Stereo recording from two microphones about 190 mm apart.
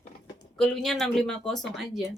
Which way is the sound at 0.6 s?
Centre (ahead or behind).